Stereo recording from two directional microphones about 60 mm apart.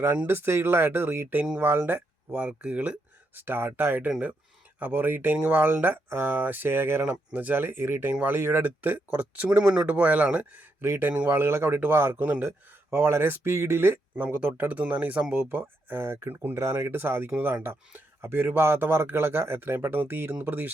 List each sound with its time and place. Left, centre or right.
0.3 s speech: right
2.6 s a sound: right
3.4 s speech: right
7.0 s speech: right
8.4 s speech: right
10.8 s a man's voice: right
15.4 s speech: right
16.6 s speech: right